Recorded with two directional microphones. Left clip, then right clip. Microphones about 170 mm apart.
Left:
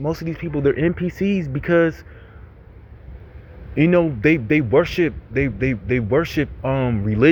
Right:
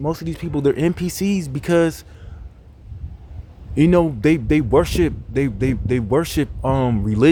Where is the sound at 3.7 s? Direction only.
30° right (ahead or behind).